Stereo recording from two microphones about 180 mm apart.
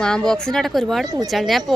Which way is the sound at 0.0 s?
5° left (ahead or behind).